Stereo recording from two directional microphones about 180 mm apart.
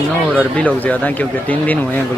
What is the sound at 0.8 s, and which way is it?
Speech, 10° left (ahead or behind).